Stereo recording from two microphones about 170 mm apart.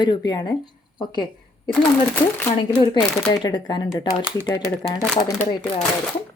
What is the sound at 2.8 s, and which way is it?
Speech, 30° left (ahead or behind).